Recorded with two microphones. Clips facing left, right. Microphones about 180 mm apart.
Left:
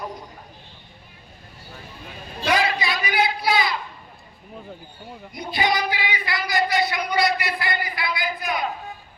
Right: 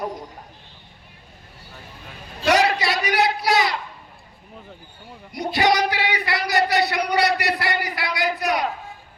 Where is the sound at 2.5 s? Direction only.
85° right.